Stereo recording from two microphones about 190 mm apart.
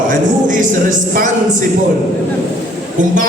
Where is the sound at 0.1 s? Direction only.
45° right (ahead or behind).